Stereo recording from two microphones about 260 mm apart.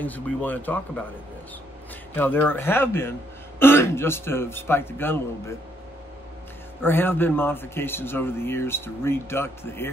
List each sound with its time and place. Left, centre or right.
0.0 s speech: centre
2.1 s speech: centre
6.8 s speech: centre